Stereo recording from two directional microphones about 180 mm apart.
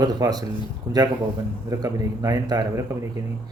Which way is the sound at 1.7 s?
20° right (ahead or behind).